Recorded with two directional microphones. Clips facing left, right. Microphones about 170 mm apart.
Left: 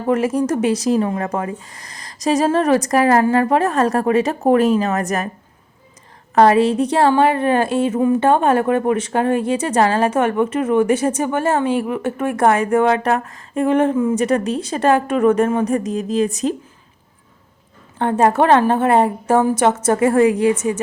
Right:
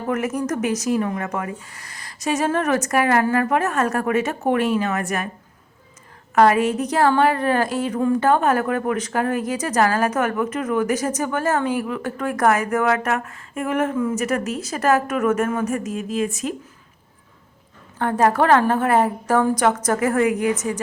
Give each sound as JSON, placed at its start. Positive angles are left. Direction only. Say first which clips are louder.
{"t": 0.1, "sound": "speech", "louder": "left 6 dB", "side_deg": 30}
{"t": 6.3, "sound": "a woman's voice", "louder": "left 4 dB", "side_deg": 30}
{"t": 18.0, "sound": "a woman's voice", "louder": "left 3 dB", "side_deg": 25}